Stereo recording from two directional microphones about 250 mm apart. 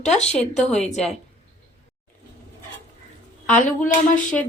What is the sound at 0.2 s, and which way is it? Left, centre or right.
Speech, left.